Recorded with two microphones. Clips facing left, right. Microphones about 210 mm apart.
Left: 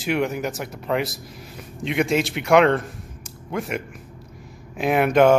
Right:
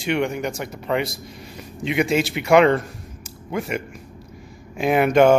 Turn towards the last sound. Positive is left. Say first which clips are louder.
# right 1 dB
turn(degrees=0)  # may be behind; listen again after turning